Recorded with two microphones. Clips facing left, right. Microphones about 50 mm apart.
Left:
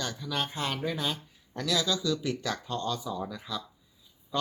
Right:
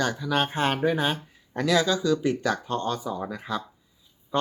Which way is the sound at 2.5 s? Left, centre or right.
Right.